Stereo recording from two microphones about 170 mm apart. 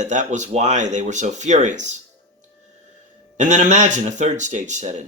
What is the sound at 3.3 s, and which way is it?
Speech, 45° right (ahead or behind).